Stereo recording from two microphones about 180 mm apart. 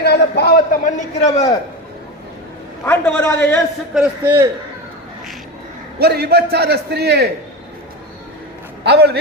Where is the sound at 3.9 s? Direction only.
10° right (ahead or behind).